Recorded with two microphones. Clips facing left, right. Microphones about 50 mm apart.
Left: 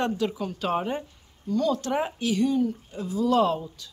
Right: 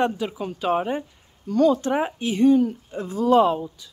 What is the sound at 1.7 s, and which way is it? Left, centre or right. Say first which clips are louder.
Speech: right 4 dB; centre.